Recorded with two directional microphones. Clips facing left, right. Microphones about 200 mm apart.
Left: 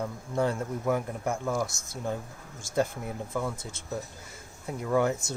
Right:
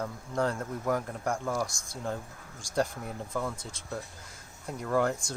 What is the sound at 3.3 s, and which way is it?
A man's voice, 5° left (ahead or behind).